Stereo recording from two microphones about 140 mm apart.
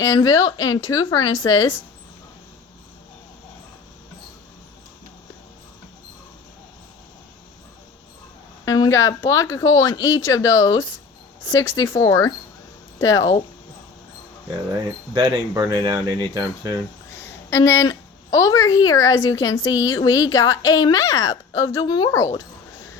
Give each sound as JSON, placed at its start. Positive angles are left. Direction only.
{"t": 0.0, "sound": "speech", "side_deg": 25}
{"t": 8.6, "sound": "speech", "side_deg": 25}
{"t": 15.1, "sound": "speech", "side_deg": -30}
{"t": 17.2, "sound": "a woman's voice", "side_deg": 20}